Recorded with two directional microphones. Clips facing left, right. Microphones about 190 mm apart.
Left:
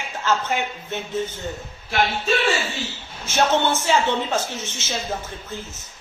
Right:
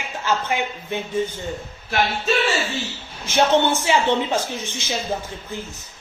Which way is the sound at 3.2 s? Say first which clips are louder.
Right 2 dB; 15° right (ahead or behind).